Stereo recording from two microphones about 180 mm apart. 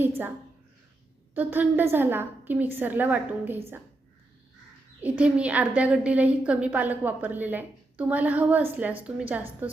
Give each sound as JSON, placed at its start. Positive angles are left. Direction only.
{"t": 1.3, "sound": "a woman's voice", "side_deg": -10}
{"t": 4.9, "sound": "a woman's voice", "side_deg": -10}